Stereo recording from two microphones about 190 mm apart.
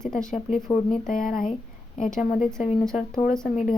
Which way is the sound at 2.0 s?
Centre (ahead or behind).